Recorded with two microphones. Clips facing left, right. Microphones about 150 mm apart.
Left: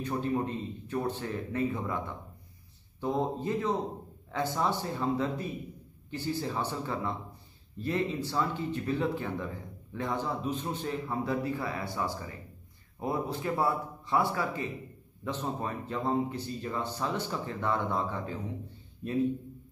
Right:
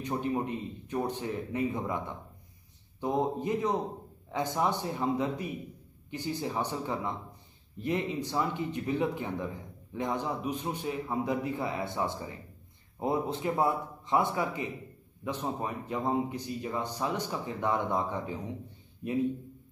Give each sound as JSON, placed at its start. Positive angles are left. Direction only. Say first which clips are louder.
{"t": 0.0, "sound": "a man's voice", "louder": "left 1 dB", "side_deg": -20}